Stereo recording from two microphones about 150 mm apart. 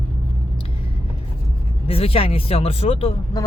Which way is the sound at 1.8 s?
40° left (ahead or behind).